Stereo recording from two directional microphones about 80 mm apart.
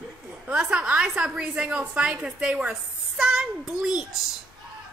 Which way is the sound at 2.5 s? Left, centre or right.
Centre.